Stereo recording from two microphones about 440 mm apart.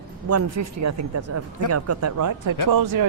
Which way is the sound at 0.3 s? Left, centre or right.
Right.